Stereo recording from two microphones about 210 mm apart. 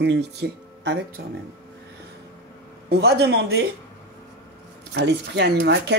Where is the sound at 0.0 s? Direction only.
55° right (ahead or behind).